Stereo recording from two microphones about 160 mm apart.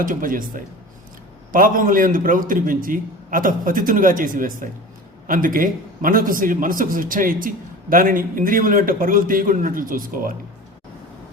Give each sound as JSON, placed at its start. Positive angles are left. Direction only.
{"t": 0.0, "sound": "a man's voice", "side_deg": -60}